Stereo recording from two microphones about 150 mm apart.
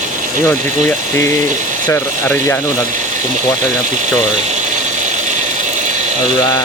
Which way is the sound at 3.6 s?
55° right (ahead or behind).